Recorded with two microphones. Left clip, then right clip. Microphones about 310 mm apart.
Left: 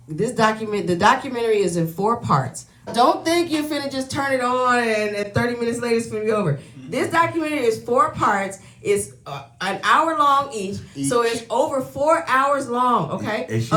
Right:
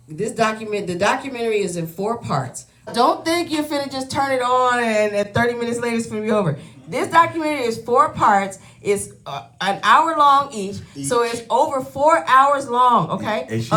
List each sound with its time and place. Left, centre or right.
0.3 s speech: left
2.9 s a woman's voice: centre